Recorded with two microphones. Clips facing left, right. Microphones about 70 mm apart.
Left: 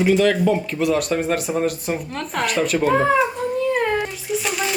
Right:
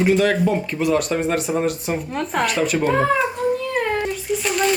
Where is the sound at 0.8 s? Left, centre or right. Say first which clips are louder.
Even; centre.